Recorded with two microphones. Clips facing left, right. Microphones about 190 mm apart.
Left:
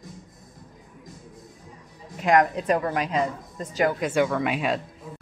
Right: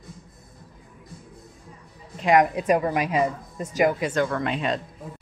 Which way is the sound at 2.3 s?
10° right (ahead or behind).